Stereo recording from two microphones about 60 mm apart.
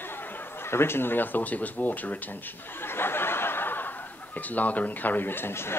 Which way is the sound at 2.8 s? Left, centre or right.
Left.